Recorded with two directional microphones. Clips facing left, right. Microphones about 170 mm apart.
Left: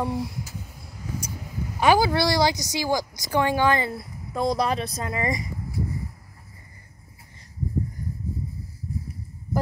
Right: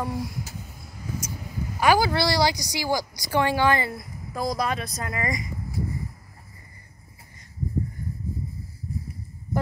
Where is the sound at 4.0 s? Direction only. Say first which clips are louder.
Left 3 dB; 30° left (ahead or behind).